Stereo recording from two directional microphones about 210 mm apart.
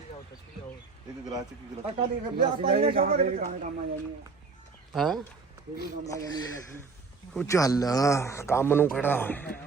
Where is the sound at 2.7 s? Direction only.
25° right (ahead or behind).